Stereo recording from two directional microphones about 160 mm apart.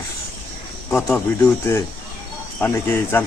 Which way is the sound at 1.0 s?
10° left (ahead or behind).